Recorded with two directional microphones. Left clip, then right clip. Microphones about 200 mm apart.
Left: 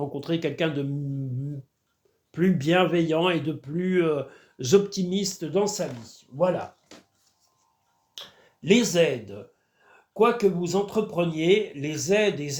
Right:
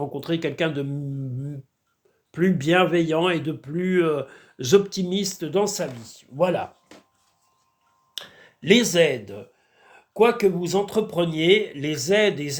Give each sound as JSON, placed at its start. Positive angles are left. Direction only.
{"t": 0.0, "sound": "speech", "side_deg": -20}
{"t": 2.3, "sound": "speech", "side_deg": -20}
{"t": 8.1, "sound": "speech", "side_deg": -35}